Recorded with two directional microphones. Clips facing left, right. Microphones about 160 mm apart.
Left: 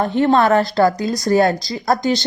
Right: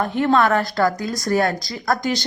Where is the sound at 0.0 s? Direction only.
30° left (ahead or behind).